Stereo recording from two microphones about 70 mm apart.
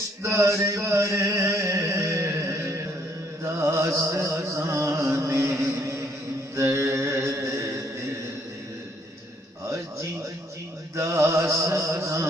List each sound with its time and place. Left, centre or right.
0.2 s a sound: right
3.4 s music: right
6.6 s mantra: right
10.9 s music: right